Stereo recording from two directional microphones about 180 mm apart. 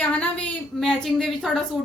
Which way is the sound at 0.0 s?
5° left (ahead or behind).